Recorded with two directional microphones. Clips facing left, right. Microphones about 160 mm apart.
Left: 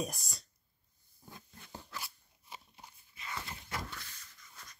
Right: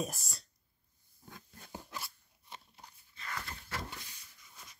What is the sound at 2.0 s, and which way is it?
Crunch, 5° left (ahead or behind).